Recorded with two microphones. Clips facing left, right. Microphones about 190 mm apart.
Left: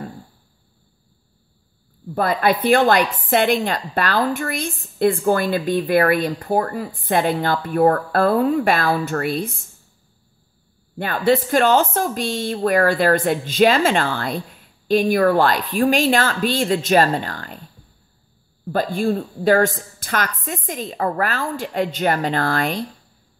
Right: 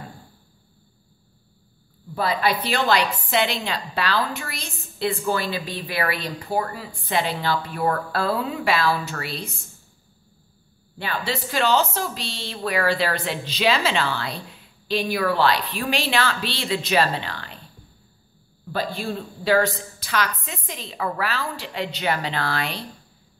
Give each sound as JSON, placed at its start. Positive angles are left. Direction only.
{"t": 2.1, "sound": "a woman's voice", "side_deg": 50}
{"t": 11.0, "sound": "a woman's voice", "side_deg": 50}
{"t": 18.7, "sound": "a woman's voice", "side_deg": 50}